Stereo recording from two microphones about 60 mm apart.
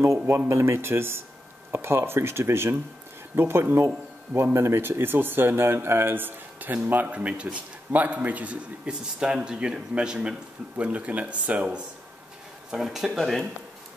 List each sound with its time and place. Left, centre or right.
0.5 s a man's voice: right
7.2 s a man's voice: centre
12.7 s a man's voice: centre